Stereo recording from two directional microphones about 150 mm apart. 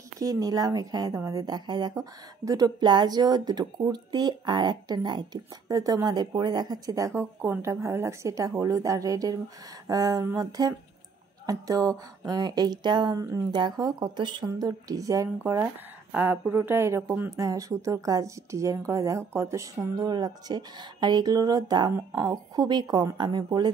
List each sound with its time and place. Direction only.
0.2 s a woman's voice: 25° right (ahead or behind)